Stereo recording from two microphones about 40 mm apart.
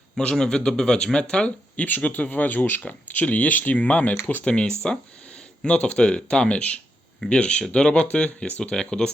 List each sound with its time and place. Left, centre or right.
0.2 s speech: centre
1.5 s speech: left
3.1 s speech: left
8.7 s speech: centre